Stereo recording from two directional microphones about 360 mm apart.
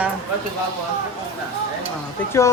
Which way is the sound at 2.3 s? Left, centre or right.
Centre.